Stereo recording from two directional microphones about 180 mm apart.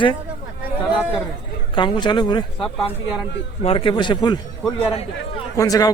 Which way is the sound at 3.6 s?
30° left (ahead or behind).